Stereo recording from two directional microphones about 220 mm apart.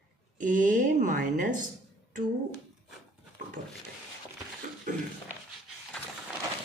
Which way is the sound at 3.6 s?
35° right (ahead or behind).